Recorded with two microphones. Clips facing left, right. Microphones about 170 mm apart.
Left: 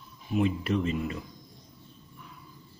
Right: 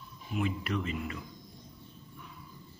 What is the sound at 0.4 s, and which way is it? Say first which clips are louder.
Speech: left 6 dB; 25° left (ahead or behind).